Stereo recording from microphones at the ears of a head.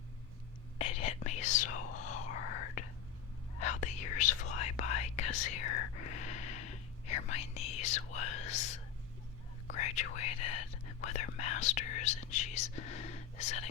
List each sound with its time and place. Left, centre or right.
0.8 s whispering: left